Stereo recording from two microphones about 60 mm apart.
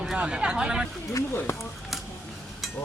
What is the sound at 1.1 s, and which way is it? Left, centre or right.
Speech, left.